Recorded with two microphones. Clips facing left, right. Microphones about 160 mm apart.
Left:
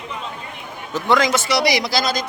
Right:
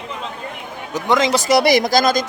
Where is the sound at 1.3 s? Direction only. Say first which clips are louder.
Right 5 dB; 45° right (ahead or behind).